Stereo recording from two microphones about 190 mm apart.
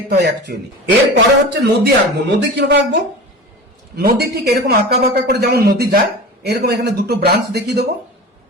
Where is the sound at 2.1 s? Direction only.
65° right (ahead or behind).